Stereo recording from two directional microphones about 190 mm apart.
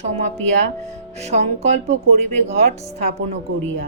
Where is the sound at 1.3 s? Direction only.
35° right (ahead or behind).